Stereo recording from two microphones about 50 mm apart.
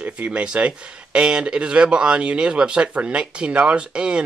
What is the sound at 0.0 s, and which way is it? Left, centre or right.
Speech, right.